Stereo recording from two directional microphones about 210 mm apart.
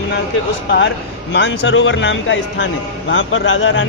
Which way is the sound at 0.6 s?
50° left (ahead or behind).